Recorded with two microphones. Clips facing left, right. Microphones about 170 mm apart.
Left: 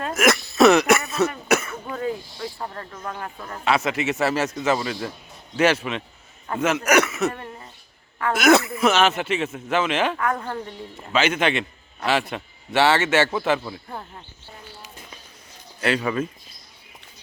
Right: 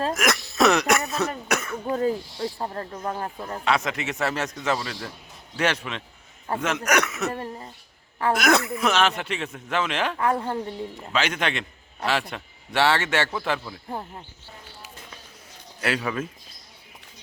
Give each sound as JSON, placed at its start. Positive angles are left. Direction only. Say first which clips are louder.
{"t": 0.1, "sound": "throat clearing", "louder": "left 5 dB", "side_deg": 0}
{"t": 1.5, "sound": "cough", "louder": "left 5 dB", "side_deg": 5}
{"t": 1.9, "sound": "snake", "louder": "right 4 dB", "side_deg": -35}
{"t": 3.6, "sound": "speech", "louder": "left 3 dB", "side_deg": 5}
{"t": 7.3, "sound": "cough", "louder": "right 4 dB", "side_deg": -35}
{"t": 8.3, "sound": "speech", "louder": "left 4 dB", "side_deg": 5}
{"t": 10.2, "sound": "a woman's voice", "louder": "right 1 dB", "side_deg": -30}
{"t": 10.4, "sound": "a woman's voice", "louder": "right 2 dB", "side_deg": -15}
{"t": 11.1, "sound": "speech", "louder": "left 5 dB", "side_deg": 5}
{"t": 15.8, "sound": "speech", "louder": "left 4 dB", "side_deg": -5}